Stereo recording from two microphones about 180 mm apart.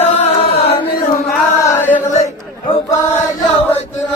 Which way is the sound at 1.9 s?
40° left (ahead or behind).